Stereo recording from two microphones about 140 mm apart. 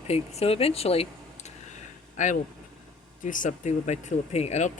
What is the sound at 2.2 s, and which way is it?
Speech, 65° left (ahead or behind).